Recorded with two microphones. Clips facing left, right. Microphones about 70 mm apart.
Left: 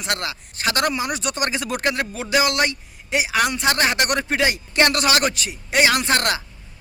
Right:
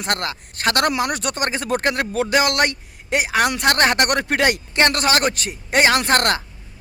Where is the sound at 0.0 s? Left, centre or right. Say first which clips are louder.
Right 2 dB; right.